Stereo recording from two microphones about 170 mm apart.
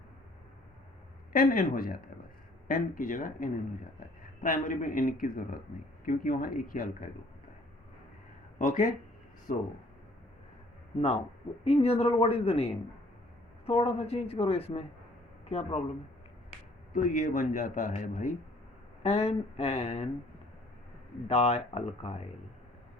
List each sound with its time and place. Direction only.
1.3 s a man's voice: 55° left (ahead or behind)
8.5 s a man's voice: 50° left (ahead or behind)
11.6 s speech: 35° left (ahead or behind)
16.9 s a man's voice: 50° left (ahead or behind)
19.0 s speech: 35° left (ahead or behind)
21.2 s speech: 35° left (ahead or behind)